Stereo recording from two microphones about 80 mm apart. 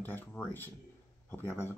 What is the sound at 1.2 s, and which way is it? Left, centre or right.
Speech, left.